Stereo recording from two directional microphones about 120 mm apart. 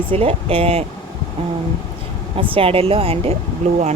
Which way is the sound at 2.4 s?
50° right (ahead or behind).